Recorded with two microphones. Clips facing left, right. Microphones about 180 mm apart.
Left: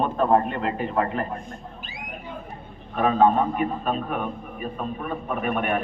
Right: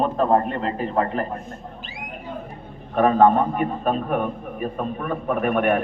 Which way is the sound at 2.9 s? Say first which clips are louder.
Right 3 dB; 50° right (ahead or behind).